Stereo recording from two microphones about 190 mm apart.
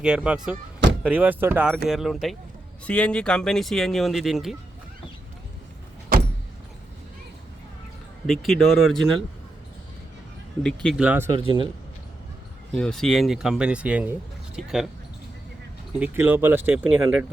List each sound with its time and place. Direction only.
0.0 s speech: 5° right (ahead or behind)
8.3 s speech: centre (ahead or behind)
10.6 s speech: 5° left (ahead or behind)
11.0 s speech: 10° right (ahead or behind)
11.3 s a man's voice: 25° right (ahead or behind)
12.7 s speech: 5° left (ahead or behind)
16.0 s speech: 10° right (ahead or behind)